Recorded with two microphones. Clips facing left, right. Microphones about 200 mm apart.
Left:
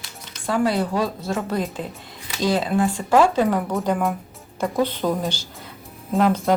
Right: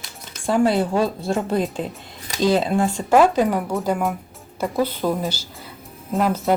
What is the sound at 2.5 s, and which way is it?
Speech, 25° right (ahead or behind).